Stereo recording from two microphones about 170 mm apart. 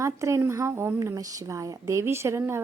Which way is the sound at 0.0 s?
15° right (ahead or behind).